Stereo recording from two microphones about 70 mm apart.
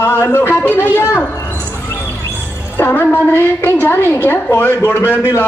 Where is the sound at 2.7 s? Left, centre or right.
Left.